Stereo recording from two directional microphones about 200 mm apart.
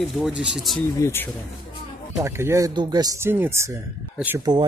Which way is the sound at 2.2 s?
15° right (ahead or behind).